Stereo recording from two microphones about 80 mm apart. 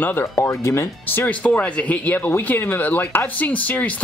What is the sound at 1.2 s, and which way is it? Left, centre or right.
Speech, centre.